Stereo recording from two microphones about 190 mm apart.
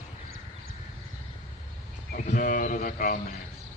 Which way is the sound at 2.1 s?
45° left (ahead or behind).